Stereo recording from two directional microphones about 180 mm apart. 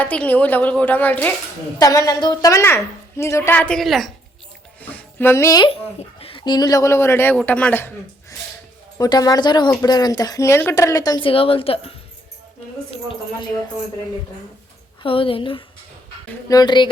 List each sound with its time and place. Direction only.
0.0 s a woman's voice: 10° left (ahead or behind)
6.1 s a man's voice: 30° left (ahead or behind)
12.9 s speech: 30° left (ahead or behind)
15.0 s speech: 30° left (ahead or behind)